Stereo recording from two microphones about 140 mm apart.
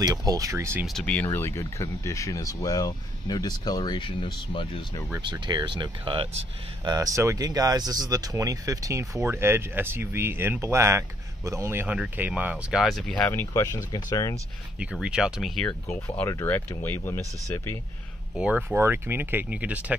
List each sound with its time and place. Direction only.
0.0 s speech: 25° right (ahead or behind)
0.8 s speech: 5° left (ahead or behind); by 4.6 s 35° left (ahead or behind)
5.2 s speech: 30° right (ahead or behind); by 12.8 s 10° right (ahead or behind)
12.8 s speech: 5° left (ahead or behind); by 13.7 s 20° left (ahead or behind)
14.8 s speech: 5° right (ahead or behind)
16.2 s speech: 15° left (ahead or behind)
18.3 s speech: 10° right (ahead or behind)